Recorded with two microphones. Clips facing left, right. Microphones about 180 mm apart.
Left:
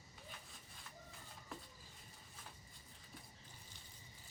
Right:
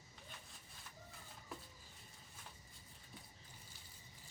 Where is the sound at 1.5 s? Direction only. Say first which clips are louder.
Even; centre (ahead or behind).